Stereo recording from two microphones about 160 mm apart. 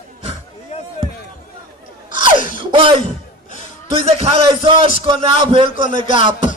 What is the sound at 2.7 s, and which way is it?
Music, 35° right (ahead or behind).